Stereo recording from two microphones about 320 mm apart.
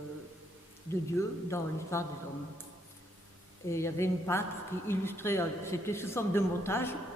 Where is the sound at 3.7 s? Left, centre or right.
Centre.